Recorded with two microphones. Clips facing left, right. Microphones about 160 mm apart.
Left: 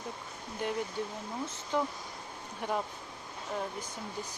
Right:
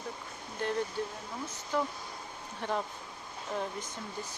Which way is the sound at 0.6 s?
15° left (ahead or behind).